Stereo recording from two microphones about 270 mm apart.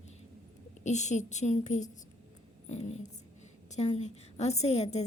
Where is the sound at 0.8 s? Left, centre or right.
Left.